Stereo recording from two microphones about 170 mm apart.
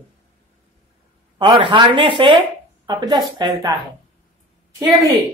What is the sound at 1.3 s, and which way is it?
Speech, 30° right (ahead or behind).